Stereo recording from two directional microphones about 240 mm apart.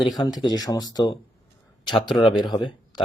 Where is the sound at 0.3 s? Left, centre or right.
Centre.